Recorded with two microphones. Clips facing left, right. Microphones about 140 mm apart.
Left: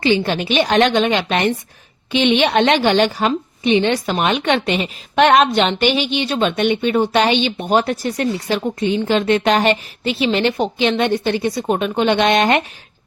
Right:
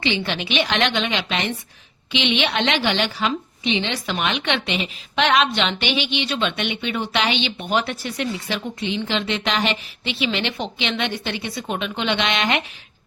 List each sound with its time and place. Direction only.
0.0 s a woman's voice: 40° left (ahead or behind)